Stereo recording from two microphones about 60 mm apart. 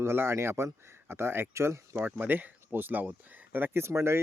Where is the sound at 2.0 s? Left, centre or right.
Right.